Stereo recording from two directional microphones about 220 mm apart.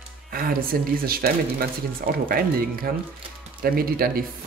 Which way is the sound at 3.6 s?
45° right (ahead or behind).